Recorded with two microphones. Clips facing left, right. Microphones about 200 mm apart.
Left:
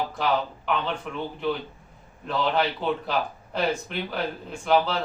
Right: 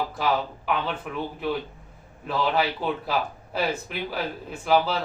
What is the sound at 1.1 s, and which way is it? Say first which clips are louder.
Speech: right 1 dB; 5° right (ahead or behind).